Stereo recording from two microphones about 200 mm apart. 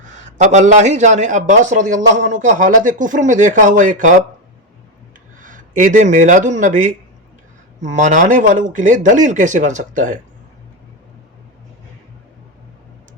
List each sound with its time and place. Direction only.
0.1 s speech: 35° right (ahead or behind)
5.4 s speech: 40° right (ahead or behind)
7.9 s speech: 40° right (ahead or behind)